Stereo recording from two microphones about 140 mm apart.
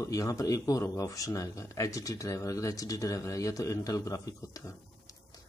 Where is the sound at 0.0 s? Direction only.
25° left (ahead or behind).